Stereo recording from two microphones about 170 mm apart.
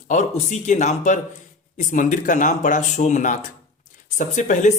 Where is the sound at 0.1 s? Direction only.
45° left (ahead or behind).